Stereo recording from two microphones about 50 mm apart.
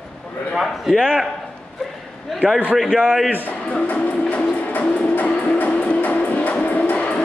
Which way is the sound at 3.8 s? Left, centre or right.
Left.